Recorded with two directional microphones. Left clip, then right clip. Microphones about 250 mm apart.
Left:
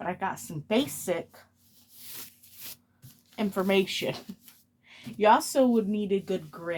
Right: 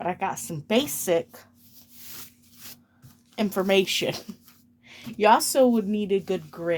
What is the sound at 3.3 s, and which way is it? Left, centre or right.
Speech, right.